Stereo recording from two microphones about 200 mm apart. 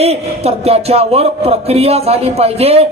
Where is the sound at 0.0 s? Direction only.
30° right (ahead or behind).